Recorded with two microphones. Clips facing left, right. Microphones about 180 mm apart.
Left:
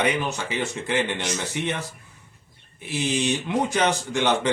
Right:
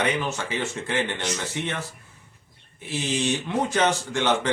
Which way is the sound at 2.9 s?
15° left (ahead or behind).